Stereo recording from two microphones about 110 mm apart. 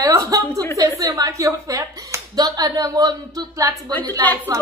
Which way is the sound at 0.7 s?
30° right (ahead or behind).